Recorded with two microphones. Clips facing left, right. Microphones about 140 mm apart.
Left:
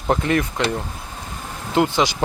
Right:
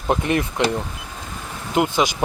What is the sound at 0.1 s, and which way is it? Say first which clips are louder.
Speech: left 1 dB; 20° right (ahead or behind).